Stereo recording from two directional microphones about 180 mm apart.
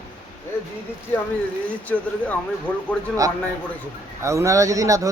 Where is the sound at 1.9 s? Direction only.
10° left (ahead or behind).